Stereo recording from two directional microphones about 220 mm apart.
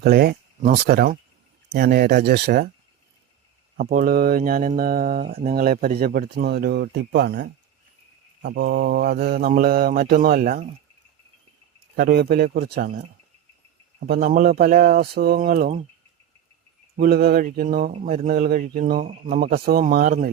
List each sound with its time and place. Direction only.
0.0 s speech: 45° right (ahead or behind)
3.8 s speech: 40° right (ahead or behind)
11.9 s speech: 45° right (ahead or behind)
14.0 s speech: 45° right (ahead or behind)
17.0 s speech: 45° right (ahead or behind)